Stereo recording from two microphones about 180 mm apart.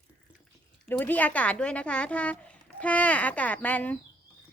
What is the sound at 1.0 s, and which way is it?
Speech, 10° left (ahead or behind).